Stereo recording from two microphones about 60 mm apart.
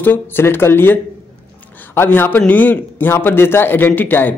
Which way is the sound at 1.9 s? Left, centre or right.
Left.